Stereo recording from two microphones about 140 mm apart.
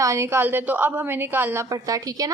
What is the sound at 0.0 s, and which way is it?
A woman's voice, 20° right (ahead or behind).